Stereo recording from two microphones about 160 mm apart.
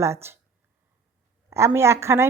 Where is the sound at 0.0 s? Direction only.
15° right (ahead or behind).